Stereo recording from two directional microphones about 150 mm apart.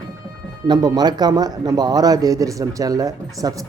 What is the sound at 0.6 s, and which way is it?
A man's voice, 25° right (ahead or behind).